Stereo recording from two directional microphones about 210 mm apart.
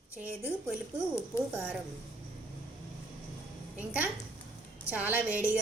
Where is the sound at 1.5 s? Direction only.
5° right (ahead or behind).